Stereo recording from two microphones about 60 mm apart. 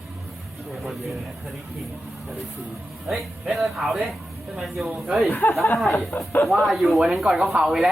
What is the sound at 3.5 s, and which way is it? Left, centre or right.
Speech, centre.